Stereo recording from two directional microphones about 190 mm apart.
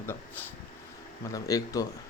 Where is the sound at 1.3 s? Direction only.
20° left (ahead or behind).